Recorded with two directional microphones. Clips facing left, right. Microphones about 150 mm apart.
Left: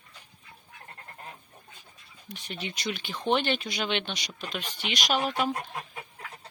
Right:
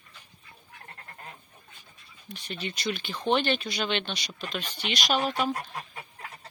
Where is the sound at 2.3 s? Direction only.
15° left (ahead or behind).